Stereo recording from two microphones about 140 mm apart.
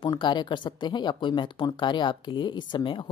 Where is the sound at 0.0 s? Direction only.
30° left (ahead or behind).